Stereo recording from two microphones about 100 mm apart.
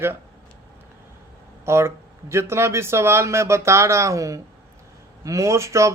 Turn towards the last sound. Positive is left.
turn(degrees=-30)  # may be behind; listen again after turning